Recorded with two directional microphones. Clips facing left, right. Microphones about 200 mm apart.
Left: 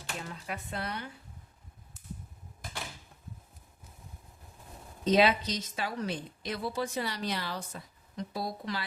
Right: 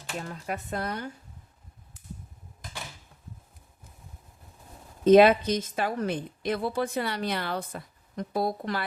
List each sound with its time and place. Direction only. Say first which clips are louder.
0.2 s a woman's voice: right 8 dB; 45° right (ahead or behind)
5.0 s a woman's voice: right 8 dB; 50° right (ahead or behind)